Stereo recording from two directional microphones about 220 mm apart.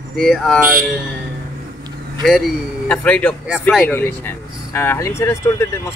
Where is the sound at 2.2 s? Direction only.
Centre (ahead or behind).